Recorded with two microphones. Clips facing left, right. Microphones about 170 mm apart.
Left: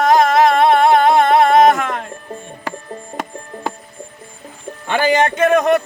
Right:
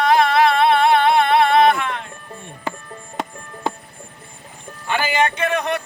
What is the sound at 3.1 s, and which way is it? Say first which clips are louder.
Music: even; 25° left (ahead or behind).